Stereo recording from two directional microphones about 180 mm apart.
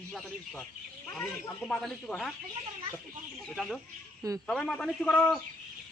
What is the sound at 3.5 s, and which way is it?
Speech, centre (ahead or behind).